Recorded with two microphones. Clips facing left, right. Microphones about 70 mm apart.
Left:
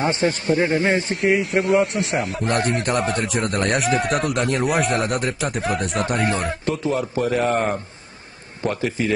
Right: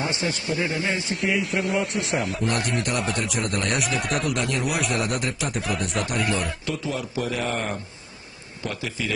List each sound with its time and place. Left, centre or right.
0.0 s a man's voice: left
1.4 s speech: left
2.4 s a man's voice: left